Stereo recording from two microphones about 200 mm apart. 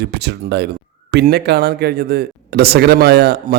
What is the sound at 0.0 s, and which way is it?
A man's voice, 55° right (ahead or behind).